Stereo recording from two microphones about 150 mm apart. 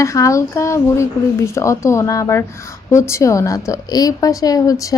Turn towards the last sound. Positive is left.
turn(degrees=25)  # may be behind; listen again after turning